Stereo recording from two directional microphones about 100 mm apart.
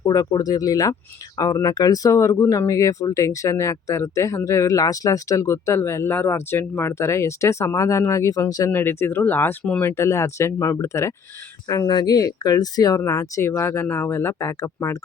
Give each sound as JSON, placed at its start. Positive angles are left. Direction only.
{"t": 0.0, "sound": "speech", "side_deg": 40}
{"t": 8.7, "sound": "speech", "side_deg": 25}
{"t": 9.8, "sound": "speech", "side_deg": 30}
{"t": 11.7, "sound": "speech", "side_deg": 45}